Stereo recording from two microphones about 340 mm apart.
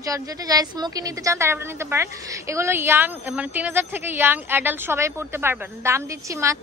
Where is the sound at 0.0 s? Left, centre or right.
Centre.